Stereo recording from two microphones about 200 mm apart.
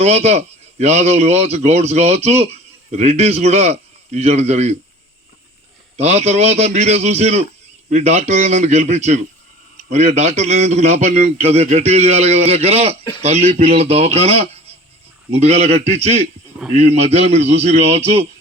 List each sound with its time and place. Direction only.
0.0 s a man's voice: 35° right (ahead or behind)
6.0 s a man's voice: 35° right (ahead or behind)